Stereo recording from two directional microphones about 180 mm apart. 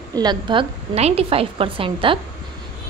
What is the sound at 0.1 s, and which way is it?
A woman's voice, 25° right (ahead or behind).